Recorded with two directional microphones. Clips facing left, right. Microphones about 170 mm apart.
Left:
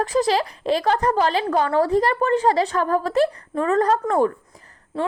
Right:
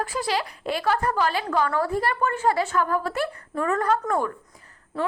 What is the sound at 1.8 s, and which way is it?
A woman's voice, 35° left (ahead or behind).